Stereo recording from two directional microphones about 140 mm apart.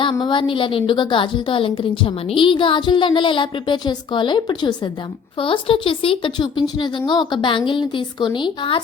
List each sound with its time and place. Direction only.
0.0 s a woman's voice: 35° left (ahead or behind)